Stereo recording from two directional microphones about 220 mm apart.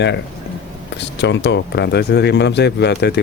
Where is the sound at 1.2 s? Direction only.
50° left (ahead or behind).